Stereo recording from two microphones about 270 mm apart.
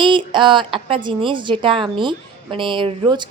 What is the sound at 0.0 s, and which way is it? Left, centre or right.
A woman's voice, centre.